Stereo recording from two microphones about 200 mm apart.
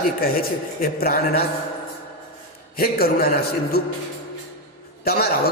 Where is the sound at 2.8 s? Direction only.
50° left (ahead or behind).